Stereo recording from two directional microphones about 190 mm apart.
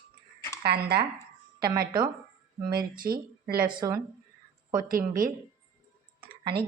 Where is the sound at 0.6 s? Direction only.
60° right (ahead or behind).